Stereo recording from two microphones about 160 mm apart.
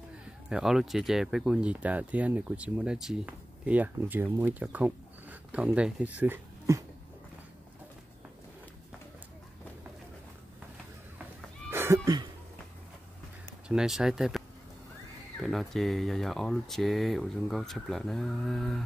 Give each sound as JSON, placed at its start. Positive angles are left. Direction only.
{"t": 0.5, "sound": "speech", "side_deg": -5}
{"t": 11.7, "sound": "cat", "side_deg": -15}
{"t": 13.7, "sound": "speech", "side_deg": -5}
{"t": 15.4, "sound": "speech", "side_deg": 0}